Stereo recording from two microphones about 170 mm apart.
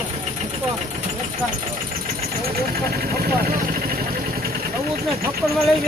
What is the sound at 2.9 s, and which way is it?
Vehicle, 65° right (ahead or behind).